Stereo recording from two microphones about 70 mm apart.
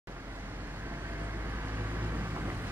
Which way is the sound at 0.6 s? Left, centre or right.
Right.